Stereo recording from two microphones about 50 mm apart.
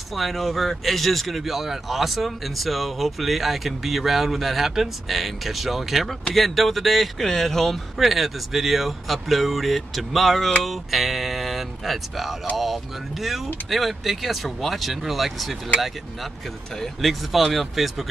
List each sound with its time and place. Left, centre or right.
0.1 s speech: centre
16.7 s speech: centre